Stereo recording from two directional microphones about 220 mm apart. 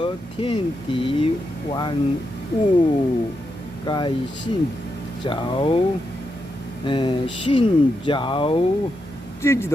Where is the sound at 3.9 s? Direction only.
20° left (ahead or behind).